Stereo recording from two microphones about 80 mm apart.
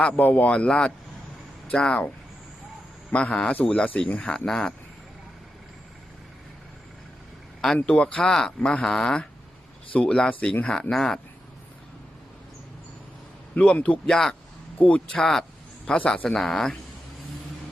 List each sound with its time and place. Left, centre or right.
0.0 s a man's voice: centre
3.1 s speech: centre
7.9 s speech: centre
13.6 s speech: centre
14.1 s speech: centre
14.8 s speech: centre
15.2 s speech: centre